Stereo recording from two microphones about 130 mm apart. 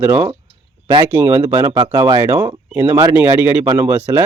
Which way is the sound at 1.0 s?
20° right (ahead or behind).